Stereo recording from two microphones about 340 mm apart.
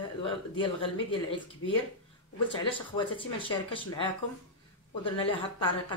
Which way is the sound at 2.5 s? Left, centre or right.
Centre.